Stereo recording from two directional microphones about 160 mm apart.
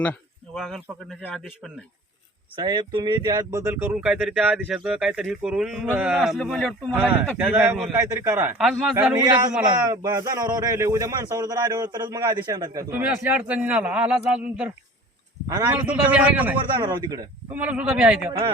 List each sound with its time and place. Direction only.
0.0 s a sound: 5° left (ahead or behind)
2.6 s speech: 25° right (ahead or behind)
4.0 s speech: 5° right (ahead or behind)
7.5 s a man's voice: 15° right (ahead or behind)
8.5 s speech: centre (ahead or behind)
9.1 s speech: 25° right (ahead or behind); by 14.7 s 5° right (ahead or behind)
15.4 s speech: 20° right (ahead or behind)
15.7 s a man's voice: 10° right (ahead or behind)
16.7 s speech: 25° right (ahead or behind)
17.5 s a man's voice: 10° right (ahead or behind)